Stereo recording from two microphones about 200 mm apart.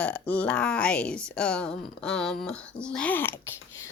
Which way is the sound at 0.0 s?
5° left (ahead or behind).